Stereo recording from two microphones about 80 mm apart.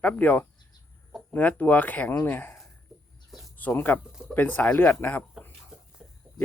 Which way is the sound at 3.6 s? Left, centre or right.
Left.